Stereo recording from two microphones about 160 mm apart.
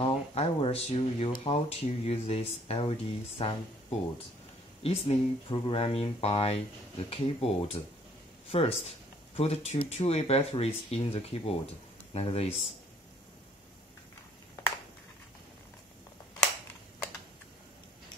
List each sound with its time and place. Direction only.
0.0 s a sound: 40° left (ahead or behind)
1.4 s speech: 40° left (ahead or behind)
4.8 s speech: 35° left (ahead or behind)